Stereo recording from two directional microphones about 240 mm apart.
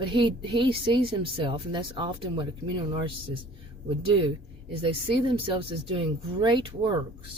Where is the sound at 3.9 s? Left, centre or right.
Right.